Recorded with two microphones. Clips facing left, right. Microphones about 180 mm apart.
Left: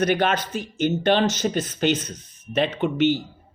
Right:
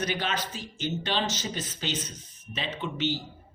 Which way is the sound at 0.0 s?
60° left (ahead or behind).